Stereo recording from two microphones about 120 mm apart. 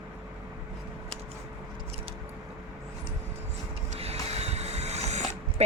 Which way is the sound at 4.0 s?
60° right (ahead or behind).